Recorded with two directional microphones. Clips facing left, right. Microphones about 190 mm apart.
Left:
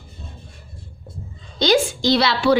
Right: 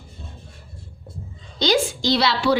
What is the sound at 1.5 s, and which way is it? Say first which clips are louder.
A woman's voice: left 3 dB; 55° left (ahead or behind).